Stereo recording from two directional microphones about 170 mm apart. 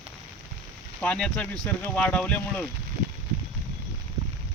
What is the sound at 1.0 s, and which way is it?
Speech, 5° left (ahead or behind).